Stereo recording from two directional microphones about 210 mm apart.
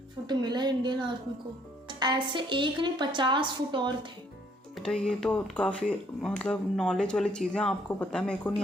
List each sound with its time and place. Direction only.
0.3 s a woman's voice: 20° right (ahead or behind)
4.7 s speech: 5° left (ahead or behind)